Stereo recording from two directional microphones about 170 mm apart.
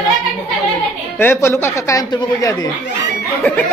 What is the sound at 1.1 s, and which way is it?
Speech, 15° left (ahead or behind).